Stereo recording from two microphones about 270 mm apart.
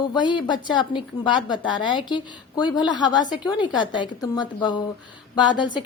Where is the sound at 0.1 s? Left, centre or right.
Centre.